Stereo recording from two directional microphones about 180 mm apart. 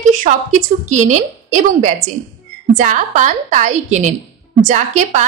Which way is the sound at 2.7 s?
45° right (ahead or behind).